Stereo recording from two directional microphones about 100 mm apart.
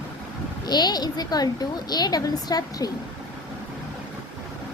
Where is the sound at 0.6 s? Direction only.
45° left (ahead or behind).